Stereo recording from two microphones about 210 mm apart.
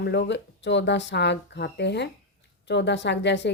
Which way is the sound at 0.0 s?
55° left (ahead or behind).